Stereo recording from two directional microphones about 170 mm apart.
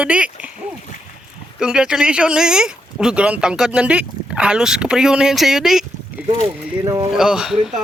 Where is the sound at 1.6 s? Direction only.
5° right (ahead or behind).